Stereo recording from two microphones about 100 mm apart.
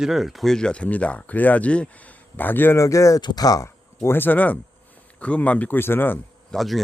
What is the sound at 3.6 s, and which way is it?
Speech, 25° left (ahead or behind).